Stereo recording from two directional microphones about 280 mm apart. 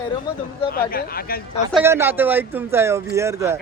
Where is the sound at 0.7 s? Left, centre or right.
Left.